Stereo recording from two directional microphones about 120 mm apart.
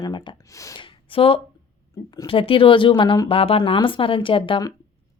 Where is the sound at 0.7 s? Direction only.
45° left (ahead or behind).